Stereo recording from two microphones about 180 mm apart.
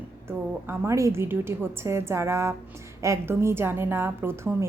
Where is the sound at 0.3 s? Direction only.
15° right (ahead or behind).